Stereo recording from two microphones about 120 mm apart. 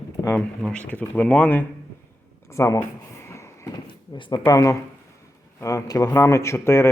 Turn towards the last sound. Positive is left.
turn(degrees=20)  # may be behind; listen again after turning